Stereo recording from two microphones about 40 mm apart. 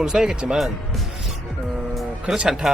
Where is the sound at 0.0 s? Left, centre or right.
Centre.